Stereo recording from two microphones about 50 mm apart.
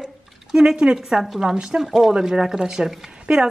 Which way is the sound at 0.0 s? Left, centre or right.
Centre.